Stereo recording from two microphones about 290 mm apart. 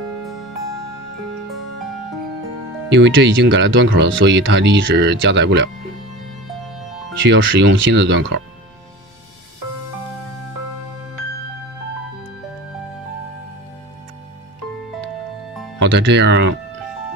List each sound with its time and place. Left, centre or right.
2.9 s speech: right
7.2 s speech: right
15.8 s speech: right